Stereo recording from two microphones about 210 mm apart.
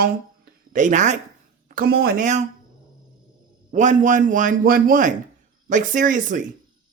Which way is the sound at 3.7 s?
35° right (ahead or behind).